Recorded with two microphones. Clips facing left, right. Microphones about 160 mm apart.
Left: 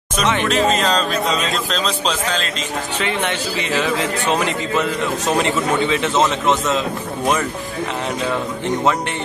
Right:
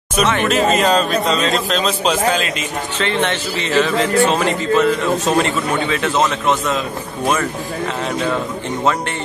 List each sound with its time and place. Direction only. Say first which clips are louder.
0.4 s a man's voice: right 1 dB; 10° right (ahead or behind)
3.0 s a man's voice: right 4 dB; 10° left (ahead or behind)